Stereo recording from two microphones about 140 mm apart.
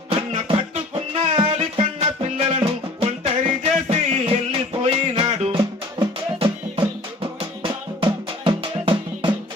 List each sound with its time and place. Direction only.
0.1 s music: 45° right (ahead or behind)